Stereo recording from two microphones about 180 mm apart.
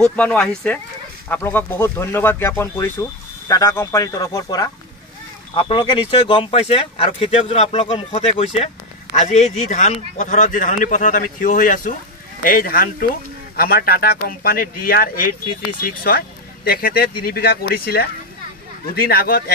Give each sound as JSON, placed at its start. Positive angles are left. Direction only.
{"t": 0.0, "sound": "speech", "side_deg": 5}